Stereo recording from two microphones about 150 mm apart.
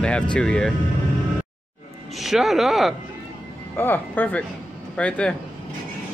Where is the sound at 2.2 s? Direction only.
Centre (ahead or behind).